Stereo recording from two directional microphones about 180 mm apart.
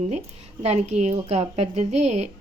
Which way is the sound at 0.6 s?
40° right (ahead or behind).